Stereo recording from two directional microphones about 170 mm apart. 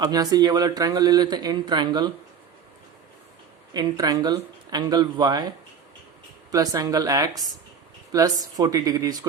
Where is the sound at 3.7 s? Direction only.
25° right (ahead or behind).